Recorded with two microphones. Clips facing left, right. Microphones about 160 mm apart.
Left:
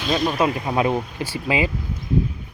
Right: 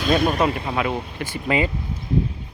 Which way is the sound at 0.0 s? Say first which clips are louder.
Right 2 dB; 50° right (ahead or behind).